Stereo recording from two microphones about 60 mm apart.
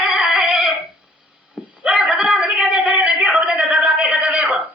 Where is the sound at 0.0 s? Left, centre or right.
Right.